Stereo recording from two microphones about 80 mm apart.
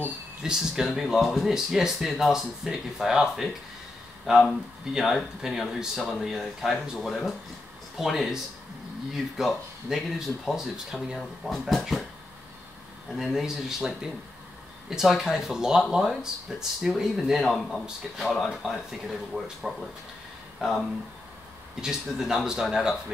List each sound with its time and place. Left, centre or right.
0.4 s speech: centre
13.1 s speech: centre
21.8 s speech: centre